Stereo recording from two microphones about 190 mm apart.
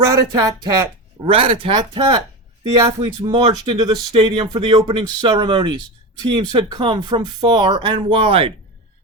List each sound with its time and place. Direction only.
0.0 s speech: 20° right (ahead or behind)